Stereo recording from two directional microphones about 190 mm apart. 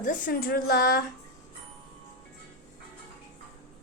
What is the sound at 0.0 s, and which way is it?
Speech, 45° left (ahead or behind).